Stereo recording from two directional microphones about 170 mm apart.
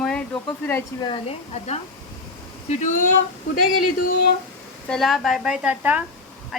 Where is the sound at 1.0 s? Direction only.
35° left (ahead or behind).